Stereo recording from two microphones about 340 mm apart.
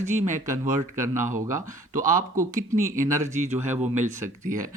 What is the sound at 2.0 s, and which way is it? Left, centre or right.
Speech, right.